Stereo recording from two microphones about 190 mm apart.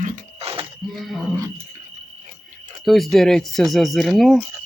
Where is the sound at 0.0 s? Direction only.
35° right (ahead or behind).